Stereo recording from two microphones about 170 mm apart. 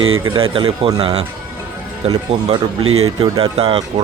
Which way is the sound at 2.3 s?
35° right (ahead or behind).